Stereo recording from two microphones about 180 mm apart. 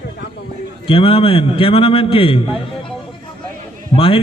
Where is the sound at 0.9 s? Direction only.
30° left (ahead or behind).